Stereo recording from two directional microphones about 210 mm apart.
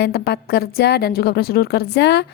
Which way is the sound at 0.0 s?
50° left (ahead or behind).